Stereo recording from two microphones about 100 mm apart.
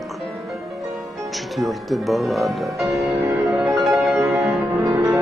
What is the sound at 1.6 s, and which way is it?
Speech, centre (ahead or behind).